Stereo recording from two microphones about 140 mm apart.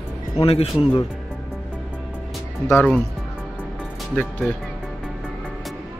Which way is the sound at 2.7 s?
10° left (ahead or behind).